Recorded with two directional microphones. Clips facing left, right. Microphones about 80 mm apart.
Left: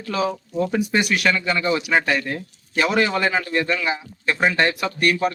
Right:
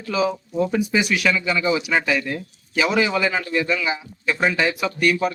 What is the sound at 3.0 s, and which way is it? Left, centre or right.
Speech, centre.